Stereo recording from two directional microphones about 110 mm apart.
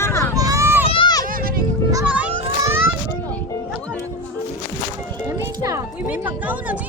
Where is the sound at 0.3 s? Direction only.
30° right (ahead or behind).